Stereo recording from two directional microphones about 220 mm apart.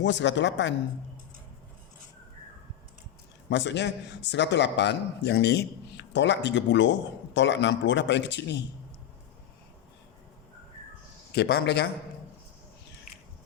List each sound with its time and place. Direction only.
0.0 s speech: 55° left (ahead or behind)
3.5 s a man's voice: 55° left (ahead or behind)
11.3 s a man's voice: 45° left (ahead or behind)